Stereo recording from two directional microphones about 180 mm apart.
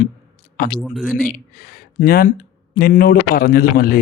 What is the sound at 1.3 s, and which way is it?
Speech, 55° left (ahead or behind).